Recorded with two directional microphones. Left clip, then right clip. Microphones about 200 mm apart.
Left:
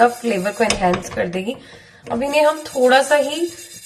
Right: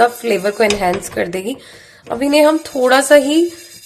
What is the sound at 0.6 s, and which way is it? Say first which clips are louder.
Speech: right 3 dB; 60° right (ahead or behind).